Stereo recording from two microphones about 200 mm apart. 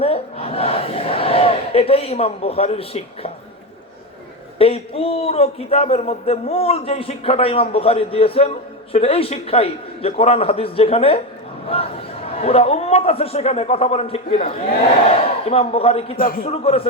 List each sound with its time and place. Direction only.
0.0 s battle cry: 30° left (ahead or behind)
4.5 s a man's voice: 30° left (ahead or behind)
12.4 s a man's voice: 30° left (ahead or behind)
15.4 s a man's voice: 30° left (ahead or behind)
16.1 s a man's voice: 45° left (ahead or behind)
16.5 s a man's voice: 30° left (ahead or behind)